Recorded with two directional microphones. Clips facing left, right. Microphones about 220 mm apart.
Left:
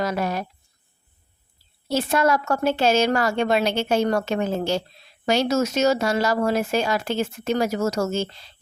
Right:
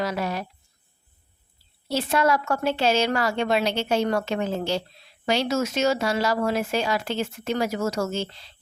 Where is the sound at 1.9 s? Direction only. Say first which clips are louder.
Left 2 dB; 45° left (ahead or behind).